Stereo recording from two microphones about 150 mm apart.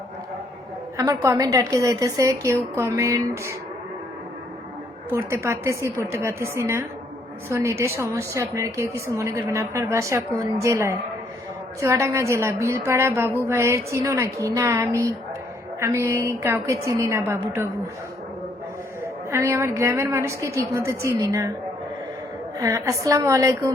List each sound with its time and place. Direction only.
0.9 s a woman's voice: 20° right (ahead or behind)
5.0 s a woman's voice: 20° right (ahead or behind)
19.0 s a woman's voice: 20° right (ahead or behind)
22.5 s a woman's voice: 20° right (ahead or behind)